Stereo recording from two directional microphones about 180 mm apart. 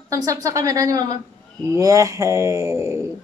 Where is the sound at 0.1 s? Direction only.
20° right (ahead or behind).